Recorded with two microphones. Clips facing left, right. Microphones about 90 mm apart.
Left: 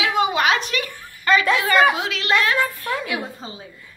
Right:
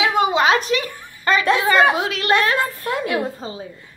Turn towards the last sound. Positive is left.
turn(degrees=-40)  # may be behind; listen again after turning